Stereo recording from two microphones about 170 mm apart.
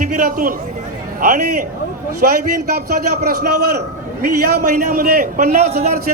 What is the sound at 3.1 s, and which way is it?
A man's voice, 70° right (ahead or behind).